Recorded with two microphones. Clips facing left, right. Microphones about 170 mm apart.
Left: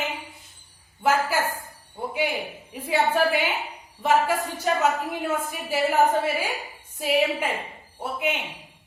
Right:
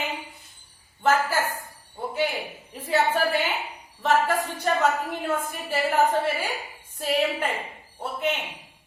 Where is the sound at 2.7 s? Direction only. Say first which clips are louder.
Even; 10° left (ahead or behind).